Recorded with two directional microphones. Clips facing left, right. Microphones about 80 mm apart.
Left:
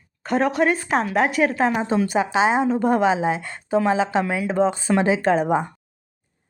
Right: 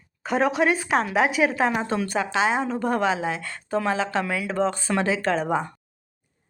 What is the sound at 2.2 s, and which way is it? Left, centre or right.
A woman's voice, left.